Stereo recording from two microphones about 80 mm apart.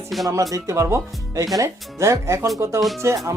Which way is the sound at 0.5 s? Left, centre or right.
Right.